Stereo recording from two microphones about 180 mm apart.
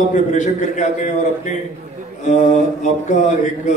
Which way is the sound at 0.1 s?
40° left (ahead or behind).